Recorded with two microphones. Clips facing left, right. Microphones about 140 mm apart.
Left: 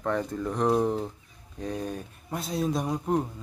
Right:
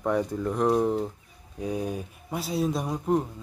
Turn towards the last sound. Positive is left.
turn(degrees=0)  # may be behind; listen again after turning